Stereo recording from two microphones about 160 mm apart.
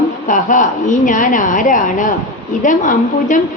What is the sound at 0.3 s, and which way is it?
A woman's voice, 55° left (ahead or behind).